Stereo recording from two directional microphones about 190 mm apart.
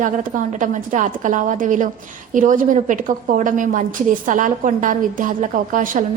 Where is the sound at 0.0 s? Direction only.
45° right (ahead or behind).